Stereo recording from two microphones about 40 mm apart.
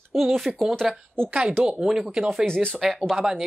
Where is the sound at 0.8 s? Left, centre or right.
Centre.